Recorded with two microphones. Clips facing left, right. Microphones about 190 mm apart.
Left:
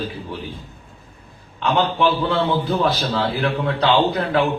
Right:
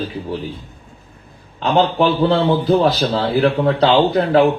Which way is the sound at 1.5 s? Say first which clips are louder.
Right 4 dB; 35° right (ahead or behind).